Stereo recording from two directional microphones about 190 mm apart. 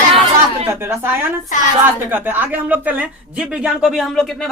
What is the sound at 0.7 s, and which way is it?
Speech, 15° right (ahead or behind).